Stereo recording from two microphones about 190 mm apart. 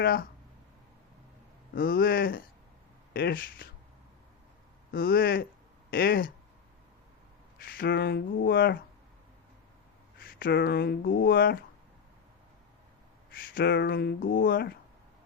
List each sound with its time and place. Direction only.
0.0 s speech: 50° left (ahead or behind)
1.7 s speech: 50° left (ahead or behind)
4.9 s speech: 50° left (ahead or behind)
7.6 s speech: 55° left (ahead or behind)
10.2 s speech: 50° left (ahead or behind)
11.2 s speech: 50° left (ahead or behind)
13.5 s speech: 55° left (ahead or behind)
14.4 s speech: 55° left (ahead or behind)